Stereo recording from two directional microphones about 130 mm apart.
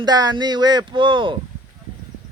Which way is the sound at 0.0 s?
30° right (ahead or behind).